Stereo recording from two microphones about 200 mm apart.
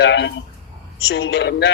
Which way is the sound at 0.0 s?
60° left (ahead or behind).